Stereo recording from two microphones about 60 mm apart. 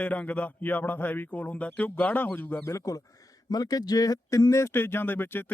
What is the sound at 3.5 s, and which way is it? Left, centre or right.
Speech, left.